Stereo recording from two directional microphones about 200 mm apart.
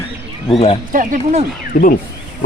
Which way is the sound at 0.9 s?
40° right (ahead or behind).